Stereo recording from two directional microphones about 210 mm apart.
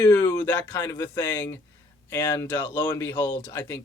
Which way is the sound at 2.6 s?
20° left (ahead or behind).